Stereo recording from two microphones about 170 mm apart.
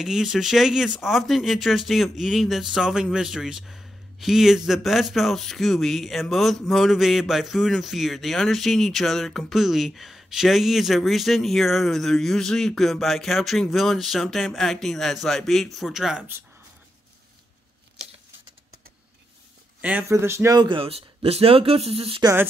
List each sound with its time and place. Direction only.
0.0 s a man's voice: 5° right (ahead or behind)
19.8 s speech: 10° right (ahead or behind); by 22.2 s 35° right (ahead or behind)
22.2 s speech: 15° right (ahead or behind)